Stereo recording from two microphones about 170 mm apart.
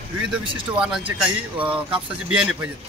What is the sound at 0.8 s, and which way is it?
Speech, 5° right (ahead or behind).